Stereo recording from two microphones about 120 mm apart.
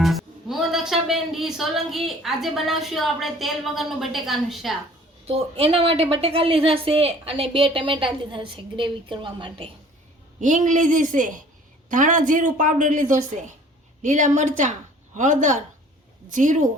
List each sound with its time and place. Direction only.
0.0 s speech: centre (ahead or behind)
5.3 s a woman's voice: 55° right (ahead or behind)
10.4 s speech: 90° right